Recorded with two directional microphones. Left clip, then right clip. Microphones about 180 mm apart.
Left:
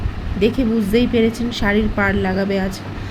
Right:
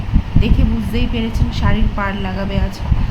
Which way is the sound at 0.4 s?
20° left (ahead or behind).